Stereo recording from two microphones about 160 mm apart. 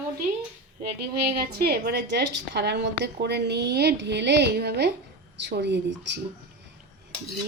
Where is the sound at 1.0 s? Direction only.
85° right.